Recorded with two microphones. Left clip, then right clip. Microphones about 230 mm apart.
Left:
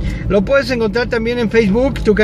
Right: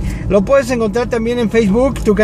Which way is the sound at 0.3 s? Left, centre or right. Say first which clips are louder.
Right 2 dB; centre.